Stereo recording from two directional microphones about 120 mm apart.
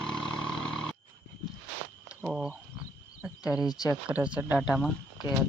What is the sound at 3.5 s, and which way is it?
Speech, 30° left (ahead or behind).